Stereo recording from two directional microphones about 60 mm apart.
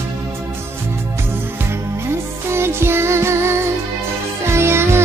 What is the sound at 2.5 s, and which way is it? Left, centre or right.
Music, right.